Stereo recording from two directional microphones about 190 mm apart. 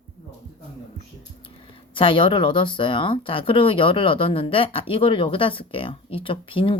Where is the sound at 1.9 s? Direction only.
25° left (ahead or behind).